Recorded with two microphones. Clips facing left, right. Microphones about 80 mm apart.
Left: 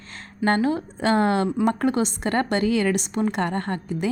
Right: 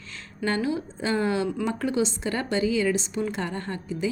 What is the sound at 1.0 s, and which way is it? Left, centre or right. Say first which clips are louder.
A woman's voice: left 5 dB; left.